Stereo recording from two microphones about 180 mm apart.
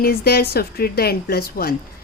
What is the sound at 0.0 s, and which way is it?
A woman's voice, 60° left (ahead or behind).